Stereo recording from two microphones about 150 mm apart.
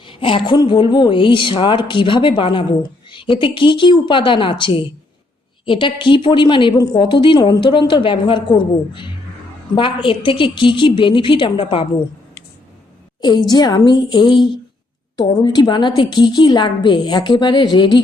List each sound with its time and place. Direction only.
0.0 s a woman's voice: 35° left (ahead or behind)
13.5 s a woman's voice: 25° left (ahead or behind)